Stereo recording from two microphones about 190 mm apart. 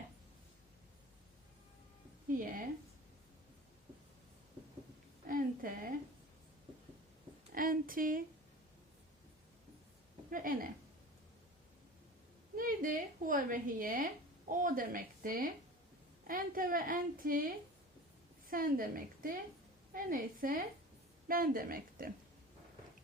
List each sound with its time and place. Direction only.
2.3 s a woman's voice: 45° right (ahead or behind)
5.3 s a sound: 45° right (ahead or behind)
7.5 s a woman's voice: 50° right (ahead or behind)
10.2 s a woman's voice: 45° right (ahead or behind)
12.5 s a woman's voice: 45° right (ahead or behind)